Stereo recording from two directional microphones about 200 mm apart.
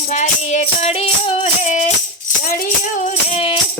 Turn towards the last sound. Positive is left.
turn(degrees=30)  # may be behind; listen again after turning